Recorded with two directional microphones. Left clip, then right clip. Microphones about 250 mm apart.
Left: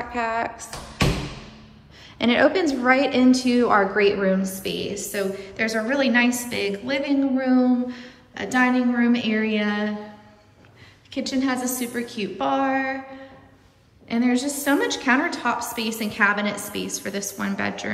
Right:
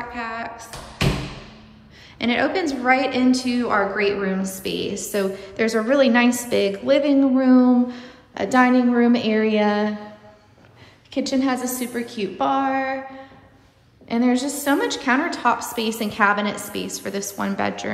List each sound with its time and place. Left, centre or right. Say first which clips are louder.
0.0 s music: left 4 dB; centre
2.1 s a woman's voice: left 2 dB; centre
11.1 s a woman's voice: right 3 dB; centre
14.0 s a woman's voice: right 2 dB; centre